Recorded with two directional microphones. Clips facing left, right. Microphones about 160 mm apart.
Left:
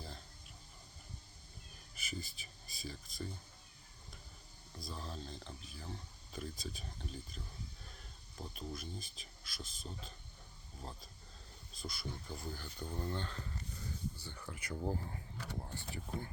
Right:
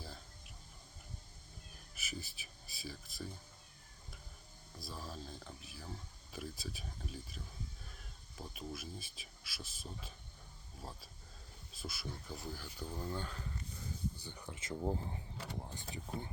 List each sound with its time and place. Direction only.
2.0 s speech: 5° right (ahead or behind)
4.8 s speech: 5° right (ahead or behind)
14.2 s speech: 15° right (ahead or behind)